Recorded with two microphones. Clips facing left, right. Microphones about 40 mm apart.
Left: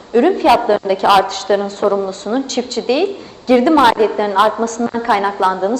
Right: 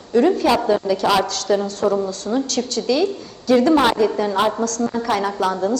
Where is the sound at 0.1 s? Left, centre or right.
Left.